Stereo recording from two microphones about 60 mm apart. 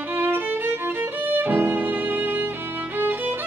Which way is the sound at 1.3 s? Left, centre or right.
Right.